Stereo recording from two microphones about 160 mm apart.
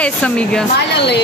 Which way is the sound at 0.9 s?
90° left.